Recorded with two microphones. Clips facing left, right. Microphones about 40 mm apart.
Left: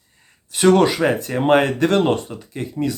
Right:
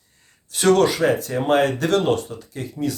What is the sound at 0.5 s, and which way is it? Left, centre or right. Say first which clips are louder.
Speech: left 2 dB; left.